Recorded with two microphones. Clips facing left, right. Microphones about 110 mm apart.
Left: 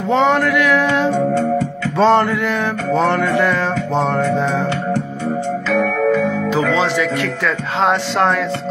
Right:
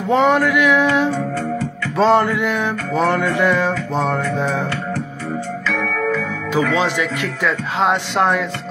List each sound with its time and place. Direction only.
0.1 s speech: 10° right (ahead or behind)
2.0 s speech: 5° right (ahead or behind)
3.9 s music: centre (ahead or behind)
4.4 s speech: 10° right (ahead or behind)
5.7 s music: 35° left (ahead or behind)
6.5 s speech: 15° right (ahead or behind)